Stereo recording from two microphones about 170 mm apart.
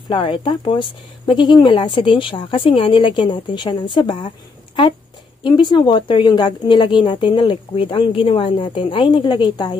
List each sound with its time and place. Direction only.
0.1 s speech: 30° left (ahead or behind)
5.4 s speech: 25° left (ahead or behind)